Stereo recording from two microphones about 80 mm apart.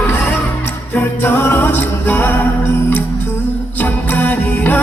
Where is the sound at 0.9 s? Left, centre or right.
Left.